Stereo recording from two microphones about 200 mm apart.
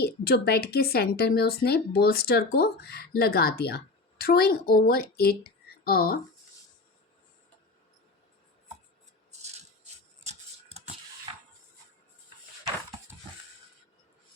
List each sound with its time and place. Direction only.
0.0 s a woman's voice: 50° left (ahead or behind)
9.3 s a sound: 35° right (ahead or behind)
11.3 s music: 20° right (ahead or behind)